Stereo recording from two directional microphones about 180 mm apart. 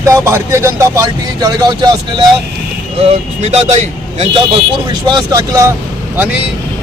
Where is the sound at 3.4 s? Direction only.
40° right (ahead or behind).